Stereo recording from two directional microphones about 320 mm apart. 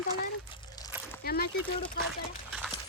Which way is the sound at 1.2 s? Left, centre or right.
Left.